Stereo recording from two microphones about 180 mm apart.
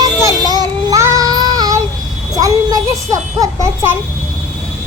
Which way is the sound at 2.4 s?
20° right (ahead or behind).